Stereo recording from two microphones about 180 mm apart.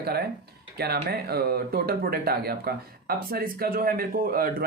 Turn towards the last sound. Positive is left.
turn(degrees=-55)  # may be behind; listen again after turning